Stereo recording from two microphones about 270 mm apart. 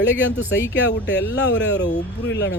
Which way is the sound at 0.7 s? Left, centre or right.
Left.